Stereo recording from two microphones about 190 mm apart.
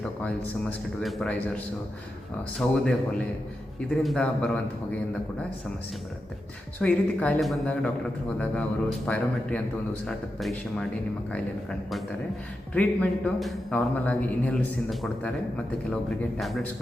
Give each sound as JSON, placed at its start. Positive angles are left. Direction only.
{"t": 0.0, "sound": "a man's voice", "side_deg": 5}
{"t": 2.6, "sound": "a man's voice", "side_deg": 5}
{"t": 6.7, "sound": "a man's voice", "side_deg": 5}